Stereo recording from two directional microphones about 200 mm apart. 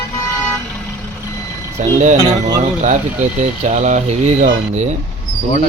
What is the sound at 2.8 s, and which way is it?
Speech, 40° right (ahead or behind).